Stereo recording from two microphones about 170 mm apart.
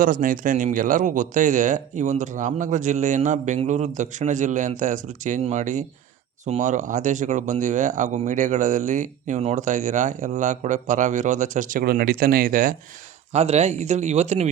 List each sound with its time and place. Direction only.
0.0 s speech: 50° right (ahead or behind)
13.3 s speech: 40° right (ahead or behind)